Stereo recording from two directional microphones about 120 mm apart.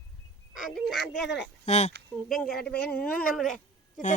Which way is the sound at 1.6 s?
70° left (ahead or behind).